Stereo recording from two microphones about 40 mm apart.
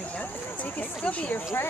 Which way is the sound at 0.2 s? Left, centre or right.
Left.